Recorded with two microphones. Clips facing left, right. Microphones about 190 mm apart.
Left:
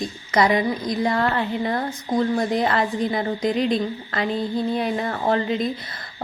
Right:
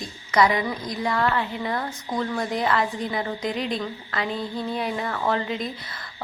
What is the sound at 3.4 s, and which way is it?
Speech, 20° left (ahead or behind).